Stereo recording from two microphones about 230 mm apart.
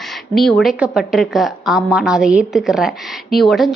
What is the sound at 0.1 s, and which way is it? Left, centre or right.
A woman's voice, centre.